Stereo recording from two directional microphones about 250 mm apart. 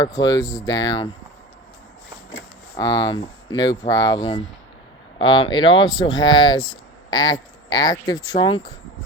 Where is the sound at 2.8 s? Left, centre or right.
Centre.